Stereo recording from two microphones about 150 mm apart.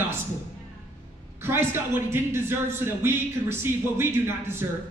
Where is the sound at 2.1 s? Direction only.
15° right (ahead or behind).